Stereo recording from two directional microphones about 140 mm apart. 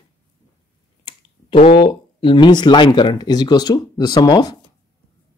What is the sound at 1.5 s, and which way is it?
Speech, 45° left (ahead or behind).